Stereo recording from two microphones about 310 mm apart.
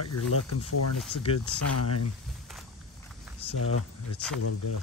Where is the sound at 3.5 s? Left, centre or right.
Left.